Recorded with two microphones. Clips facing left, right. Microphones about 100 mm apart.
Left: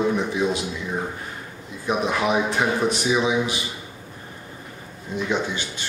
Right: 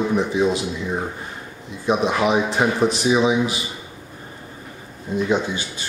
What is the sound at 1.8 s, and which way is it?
Speech, 20° right (ahead or behind).